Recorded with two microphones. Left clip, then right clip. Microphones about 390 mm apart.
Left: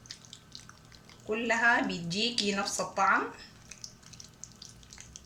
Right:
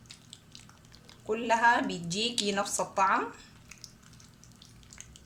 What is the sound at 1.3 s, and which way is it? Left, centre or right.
A woman's voice, centre.